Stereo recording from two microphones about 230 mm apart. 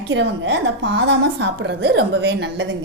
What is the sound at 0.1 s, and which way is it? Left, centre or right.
A woman's voice, right.